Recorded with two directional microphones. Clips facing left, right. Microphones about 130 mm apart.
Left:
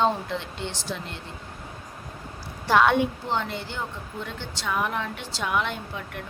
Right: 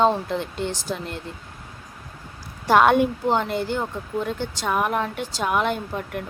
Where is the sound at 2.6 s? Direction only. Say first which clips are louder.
Right 4 dB; 50° right (ahead or behind).